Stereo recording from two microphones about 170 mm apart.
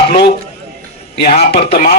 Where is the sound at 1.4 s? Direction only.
35° left (ahead or behind).